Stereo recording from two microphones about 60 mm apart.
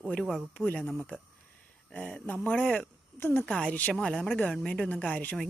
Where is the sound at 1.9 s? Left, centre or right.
Left.